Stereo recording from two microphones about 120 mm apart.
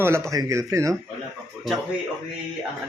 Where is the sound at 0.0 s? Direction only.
25° right (ahead or behind).